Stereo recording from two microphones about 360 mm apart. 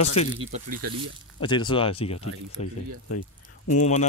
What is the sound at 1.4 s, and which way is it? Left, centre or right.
Speech, centre.